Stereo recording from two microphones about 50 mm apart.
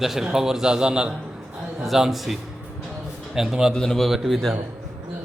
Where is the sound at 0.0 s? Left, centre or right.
Centre.